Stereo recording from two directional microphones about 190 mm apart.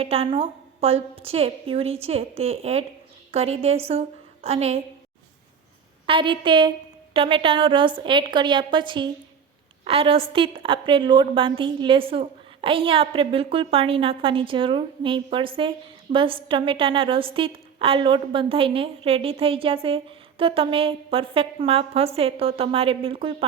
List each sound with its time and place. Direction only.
0.0 s a woman's voice: 30° right (ahead or behind)
6.1 s a woman's voice: 25° right (ahead or behind)